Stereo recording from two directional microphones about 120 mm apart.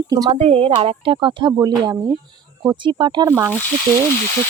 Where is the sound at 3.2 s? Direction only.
25° right (ahead or behind).